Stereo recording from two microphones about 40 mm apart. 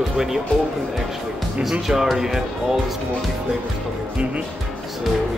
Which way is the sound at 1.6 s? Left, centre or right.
Centre.